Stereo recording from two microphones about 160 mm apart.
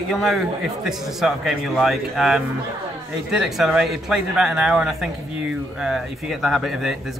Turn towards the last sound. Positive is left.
turn(degrees=0)  # may be behind; listen again after turning